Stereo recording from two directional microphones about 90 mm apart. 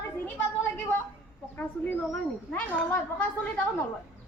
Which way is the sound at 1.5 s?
25° left (ahead or behind).